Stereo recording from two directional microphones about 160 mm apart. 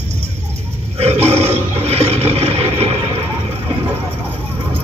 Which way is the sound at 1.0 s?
40° right (ahead or behind).